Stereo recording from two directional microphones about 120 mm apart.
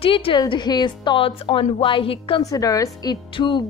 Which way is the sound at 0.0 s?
50° left (ahead or behind).